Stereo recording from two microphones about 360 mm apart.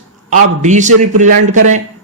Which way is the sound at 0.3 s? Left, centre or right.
Centre.